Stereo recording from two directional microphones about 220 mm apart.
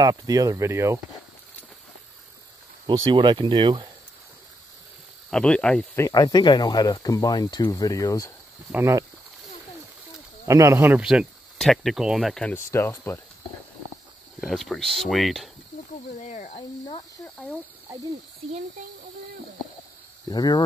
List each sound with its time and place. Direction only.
0.0 s speech: 15° right (ahead or behind)
2.9 s speech: 20° right (ahead or behind)
5.3 s speech: 5° left (ahead or behind)
6.0 s speech: 15° left (ahead or behind)
8.7 s speech: 10° right (ahead or behind)
10.4 s speech: 15° right (ahead or behind); by 13.2 s 10° left (ahead or behind)
14.4 s speech: centre (ahead or behind)
16.2 s speech: 30° left (ahead or behind)
17.2 s speech: 5° left (ahead or behind)
20.2 s speech: 20° left (ahead or behind)